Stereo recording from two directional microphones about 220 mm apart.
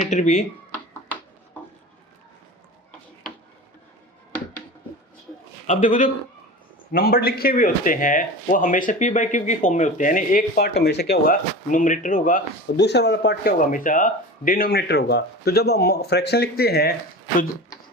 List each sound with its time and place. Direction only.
0.0 s speech: 30° left (ahead or behind)
5.6 s speech: 35° left (ahead or behind)
12.7 s speech: 50° left (ahead or behind)